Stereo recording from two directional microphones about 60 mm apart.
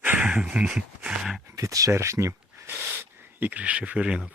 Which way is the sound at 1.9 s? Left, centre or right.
Right.